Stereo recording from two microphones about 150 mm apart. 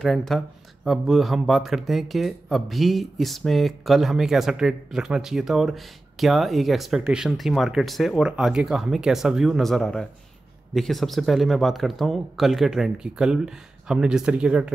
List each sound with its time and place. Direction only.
0.0 s speech: 5° left (ahead or behind)